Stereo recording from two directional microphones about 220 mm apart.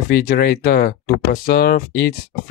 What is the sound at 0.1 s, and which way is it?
Speech, 45° left (ahead or behind).